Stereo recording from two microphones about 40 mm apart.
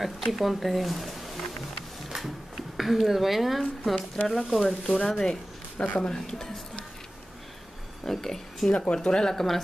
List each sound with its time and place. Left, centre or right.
0.0 s speech: centre
5.0 s speech: centre
8.0 s a sound: centre
8.6 s speech: left
9.3 s speech: centre